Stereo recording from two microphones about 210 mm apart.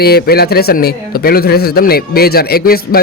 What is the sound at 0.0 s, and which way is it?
A man's voice, 50° left (ahead or behind).